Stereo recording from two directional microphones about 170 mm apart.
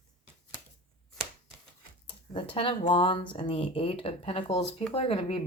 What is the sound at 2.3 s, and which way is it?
Speech, 30° left (ahead or behind).